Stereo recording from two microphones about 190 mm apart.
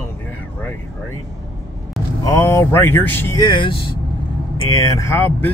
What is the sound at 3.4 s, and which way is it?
Speech, 25° left (ahead or behind).